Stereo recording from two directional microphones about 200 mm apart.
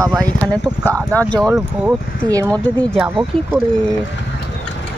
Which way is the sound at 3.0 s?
10° right (ahead or behind).